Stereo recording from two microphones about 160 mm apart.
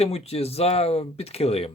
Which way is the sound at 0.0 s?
40° left (ahead or behind).